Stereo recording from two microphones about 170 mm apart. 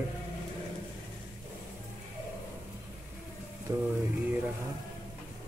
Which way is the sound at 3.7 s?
20° right (ahead or behind).